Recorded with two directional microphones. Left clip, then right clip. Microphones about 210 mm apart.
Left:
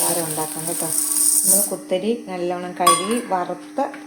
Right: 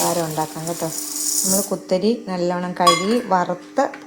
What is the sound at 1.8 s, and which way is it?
A woman's voice, 35° right (ahead or behind).